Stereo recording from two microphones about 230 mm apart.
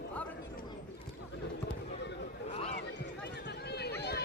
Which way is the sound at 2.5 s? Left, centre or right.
Left.